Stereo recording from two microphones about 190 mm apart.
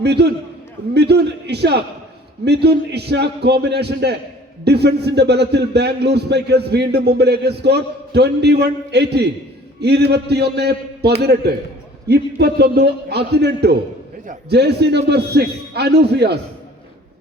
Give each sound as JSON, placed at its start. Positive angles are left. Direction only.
{"t": 0.0, "sound": "a man's voice", "side_deg": -60}